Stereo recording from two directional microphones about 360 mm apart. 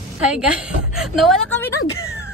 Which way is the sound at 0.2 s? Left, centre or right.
Centre.